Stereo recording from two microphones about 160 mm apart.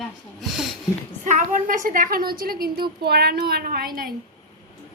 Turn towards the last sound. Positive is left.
turn(degrees=-65)  # may be behind; listen again after turning